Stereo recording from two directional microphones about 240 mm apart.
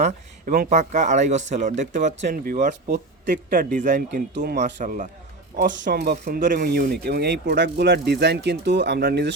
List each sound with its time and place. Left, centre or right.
0.0 s speech: right